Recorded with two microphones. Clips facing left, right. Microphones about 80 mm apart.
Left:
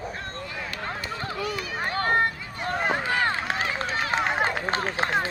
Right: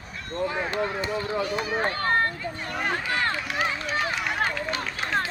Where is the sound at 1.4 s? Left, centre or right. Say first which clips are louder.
Right 2 dB; right.